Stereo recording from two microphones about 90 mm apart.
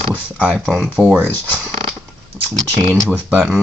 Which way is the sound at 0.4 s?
10° right (ahead or behind).